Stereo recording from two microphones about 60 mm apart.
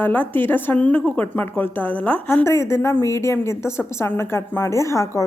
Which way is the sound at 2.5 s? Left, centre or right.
Left.